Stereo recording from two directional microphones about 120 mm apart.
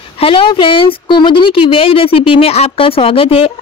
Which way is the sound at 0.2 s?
50° left (ahead or behind).